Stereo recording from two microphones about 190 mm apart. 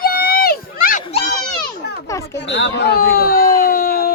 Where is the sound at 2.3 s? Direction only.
65° left (ahead or behind).